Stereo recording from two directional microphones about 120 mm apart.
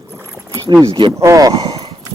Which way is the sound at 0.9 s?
45° right (ahead or behind).